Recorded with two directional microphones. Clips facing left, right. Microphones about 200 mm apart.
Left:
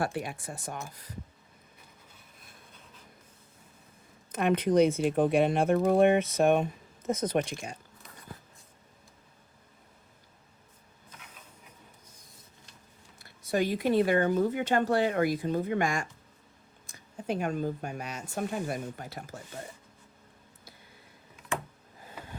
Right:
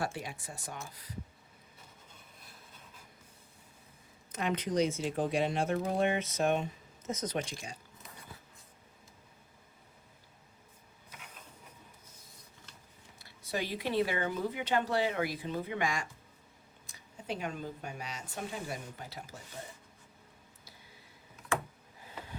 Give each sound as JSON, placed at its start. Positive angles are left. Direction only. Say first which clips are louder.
{"t": 0.0, "sound": "speech", "louder": "left 5 dB", "side_deg": 55}
{"t": 4.3, "sound": "speech", "louder": "left 8 dB", "side_deg": 55}
{"t": 13.1, "sound": "speech", "louder": "left 8 dB", "side_deg": 50}